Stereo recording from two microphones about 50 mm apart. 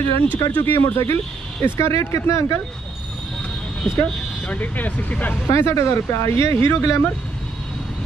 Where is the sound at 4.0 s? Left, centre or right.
Left.